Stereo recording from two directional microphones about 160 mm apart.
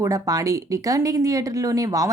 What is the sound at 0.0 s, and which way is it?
Speech, 20° right (ahead or behind).